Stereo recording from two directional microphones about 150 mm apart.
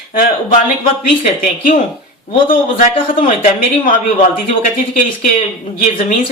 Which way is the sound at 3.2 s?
60° left (ahead or behind).